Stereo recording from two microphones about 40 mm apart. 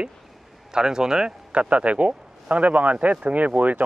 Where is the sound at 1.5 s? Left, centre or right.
Right.